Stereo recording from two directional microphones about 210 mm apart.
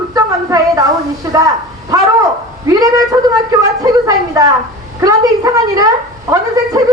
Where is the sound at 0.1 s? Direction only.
15° right (ahead or behind).